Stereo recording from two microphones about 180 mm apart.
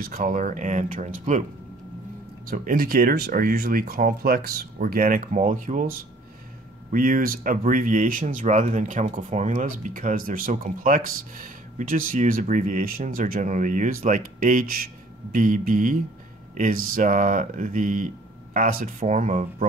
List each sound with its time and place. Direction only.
0.0 s speech: 50° right (ahead or behind)
2.5 s speech: 50° right (ahead or behind)